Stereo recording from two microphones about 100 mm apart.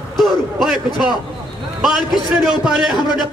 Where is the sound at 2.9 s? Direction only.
45° left (ahead or behind).